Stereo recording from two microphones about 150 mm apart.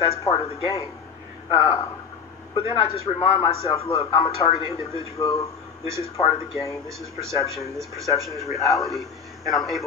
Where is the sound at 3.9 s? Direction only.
25° left (ahead or behind).